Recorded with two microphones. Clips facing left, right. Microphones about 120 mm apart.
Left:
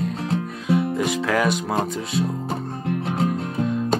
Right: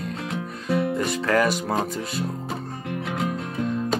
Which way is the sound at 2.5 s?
40° left (ahead or behind).